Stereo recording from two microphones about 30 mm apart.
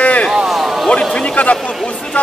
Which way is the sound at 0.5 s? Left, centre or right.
Centre.